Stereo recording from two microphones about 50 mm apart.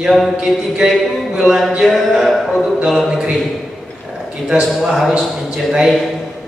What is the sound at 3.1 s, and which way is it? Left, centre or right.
Speech, centre.